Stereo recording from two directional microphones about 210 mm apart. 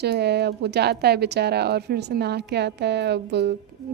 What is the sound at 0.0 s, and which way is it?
Speech, 50° right (ahead or behind).